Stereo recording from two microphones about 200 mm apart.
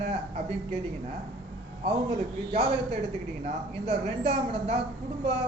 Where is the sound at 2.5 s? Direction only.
30° right (ahead or behind).